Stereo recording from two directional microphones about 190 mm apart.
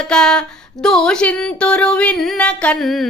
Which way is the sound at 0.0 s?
5° left (ahead or behind).